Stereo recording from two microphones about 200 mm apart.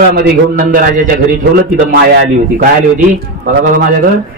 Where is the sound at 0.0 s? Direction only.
45° right (ahead or behind).